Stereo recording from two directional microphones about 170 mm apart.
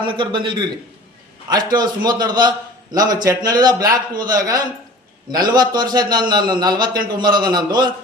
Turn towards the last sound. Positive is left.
turn(degrees=-25)  # may be behind; listen again after turning